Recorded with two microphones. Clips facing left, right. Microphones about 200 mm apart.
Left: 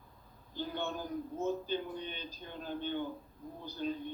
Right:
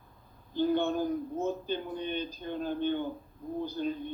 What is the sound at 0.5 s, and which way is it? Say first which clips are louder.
A woman's voice: right 11 dB; 50° right (ahead or behind).